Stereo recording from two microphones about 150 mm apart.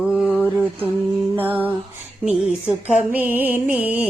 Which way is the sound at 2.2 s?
5° right (ahead or behind).